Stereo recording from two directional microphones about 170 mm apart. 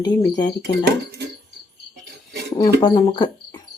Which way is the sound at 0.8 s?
80° right.